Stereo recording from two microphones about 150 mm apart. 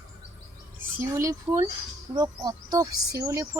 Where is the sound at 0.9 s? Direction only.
20° right (ahead or behind).